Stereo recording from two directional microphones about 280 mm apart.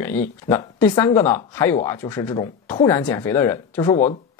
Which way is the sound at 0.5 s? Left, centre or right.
Centre.